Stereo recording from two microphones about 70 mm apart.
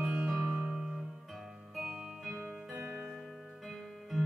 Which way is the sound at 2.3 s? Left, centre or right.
Right.